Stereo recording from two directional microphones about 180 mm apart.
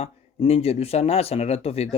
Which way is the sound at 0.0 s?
35° left (ahead or behind).